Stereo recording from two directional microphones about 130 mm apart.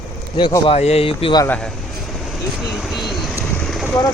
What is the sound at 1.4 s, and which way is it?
Speech, 10° left (ahead or behind).